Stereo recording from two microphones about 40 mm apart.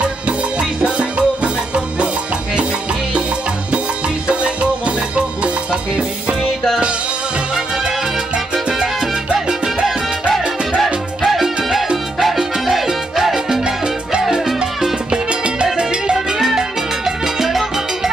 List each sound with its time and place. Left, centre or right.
0.6 s music: right
4.3 s music: right
9.3 s salsa music: right
10.8 s music: centre
12.2 s salsa music: centre
16.4 s salsa music: centre